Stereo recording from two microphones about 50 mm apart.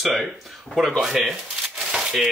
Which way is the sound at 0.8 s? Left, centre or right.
Centre.